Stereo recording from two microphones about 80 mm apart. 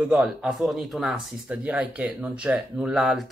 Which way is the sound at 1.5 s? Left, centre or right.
Centre.